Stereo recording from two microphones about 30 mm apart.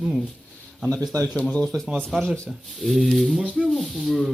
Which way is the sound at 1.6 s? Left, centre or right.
Centre.